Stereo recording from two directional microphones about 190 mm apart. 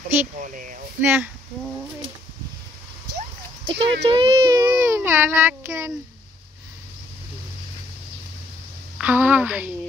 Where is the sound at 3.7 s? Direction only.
65° right (ahead or behind).